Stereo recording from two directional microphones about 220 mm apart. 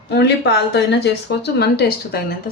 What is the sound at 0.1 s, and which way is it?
Speech, 50° left (ahead or behind).